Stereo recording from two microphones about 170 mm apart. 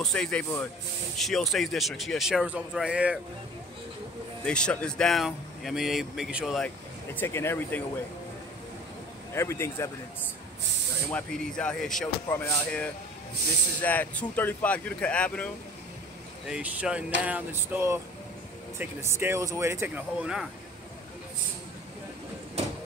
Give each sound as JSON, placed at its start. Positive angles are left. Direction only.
{"t": 0.0, "sound": "speech", "side_deg": 5}
{"t": 4.5, "sound": "speech", "side_deg": 5}
{"t": 7.2, "sound": "speech", "side_deg": 15}
{"t": 9.3, "sound": "speech", "side_deg": 15}
{"t": 11.1, "sound": "speech", "side_deg": 5}
{"t": 16.4, "sound": "speech", "side_deg": -5}